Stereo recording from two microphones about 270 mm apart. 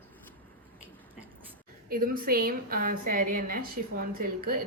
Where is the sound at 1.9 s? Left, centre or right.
Right.